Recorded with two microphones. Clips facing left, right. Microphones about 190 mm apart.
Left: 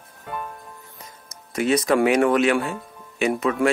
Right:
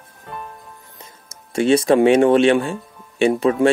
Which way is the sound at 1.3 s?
30° right (ahead or behind).